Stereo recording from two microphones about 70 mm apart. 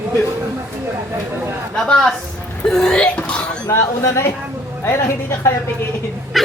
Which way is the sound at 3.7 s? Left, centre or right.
Left.